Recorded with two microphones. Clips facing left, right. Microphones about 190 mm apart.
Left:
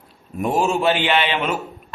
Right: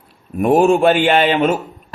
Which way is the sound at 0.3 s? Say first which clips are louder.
Right 8 dB; 60° right (ahead or behind).